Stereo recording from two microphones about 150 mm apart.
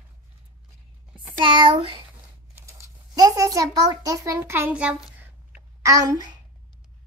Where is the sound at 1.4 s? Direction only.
35° right (ahead or behind).